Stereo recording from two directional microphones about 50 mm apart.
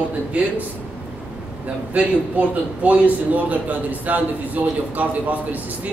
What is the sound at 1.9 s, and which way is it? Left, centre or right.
A man's voice, right.